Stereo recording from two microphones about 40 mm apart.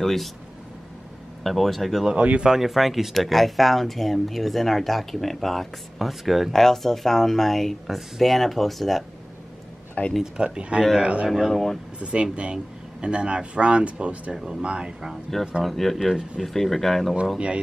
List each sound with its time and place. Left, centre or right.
0.0 s speech: centre
1.4 s speech: centre
2.1 s speech: right
2.4 s speech: centre
6.5 s speech: centre
10.2 s a man's voice: right
11.2 s speech: centre
11.5 s speech: centre
12.0 s speech: right
14.3 s speech: centre
14.6 s speech: right
15.6 s speech: centre